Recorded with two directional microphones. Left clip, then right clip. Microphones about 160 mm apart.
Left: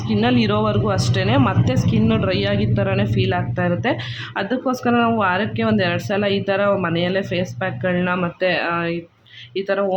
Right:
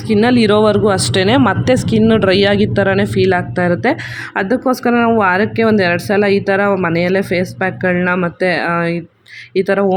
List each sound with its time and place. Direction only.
0.1 s speech: 30° right (ahead or behind)